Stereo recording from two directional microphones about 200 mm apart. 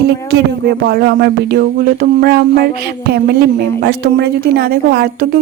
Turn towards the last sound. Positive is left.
turn(degrees=-50)  # may be behind; listen again after turning